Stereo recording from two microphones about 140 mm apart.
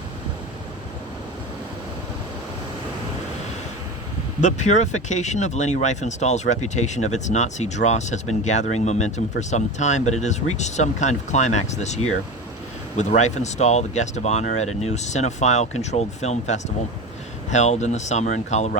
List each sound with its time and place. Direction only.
4.4 s speech: 60° left (ahead or behind)